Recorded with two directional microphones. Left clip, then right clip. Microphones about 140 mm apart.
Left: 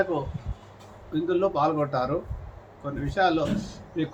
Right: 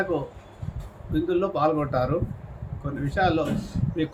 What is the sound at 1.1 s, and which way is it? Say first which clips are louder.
Speech: even; 15° right (ahead or behind).